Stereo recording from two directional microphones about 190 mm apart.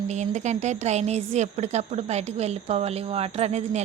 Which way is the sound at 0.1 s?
35° right (ahead or behind).